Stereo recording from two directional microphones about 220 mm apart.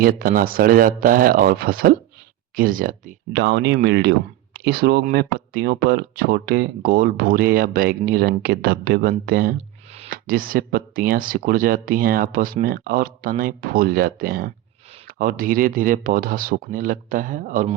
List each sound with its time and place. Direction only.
0.0 s speech: 40° right (ahead or behind)
3.4 s speech: 50° right (ahead or behind)